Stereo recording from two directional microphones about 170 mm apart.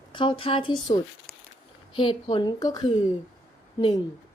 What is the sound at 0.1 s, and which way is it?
Speech, 30° left (ahead or behind).